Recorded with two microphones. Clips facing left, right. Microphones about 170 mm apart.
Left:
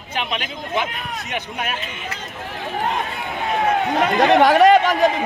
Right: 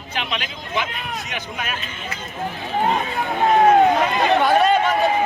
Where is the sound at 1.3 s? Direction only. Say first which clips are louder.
Left 3 dB; 60° left (ahead or behind).